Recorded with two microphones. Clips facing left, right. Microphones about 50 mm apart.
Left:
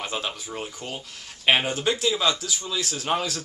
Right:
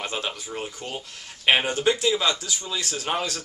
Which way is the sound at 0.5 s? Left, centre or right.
Centre.